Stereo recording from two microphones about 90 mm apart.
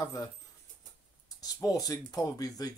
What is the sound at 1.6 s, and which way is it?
Speech, 45° left (ahead or behind).